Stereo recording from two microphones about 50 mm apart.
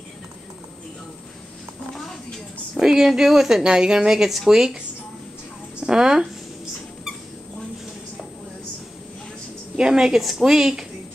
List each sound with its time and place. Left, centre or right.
2.8 s speech: centre
5.8 s a sound: centre
9.8 s speech: centre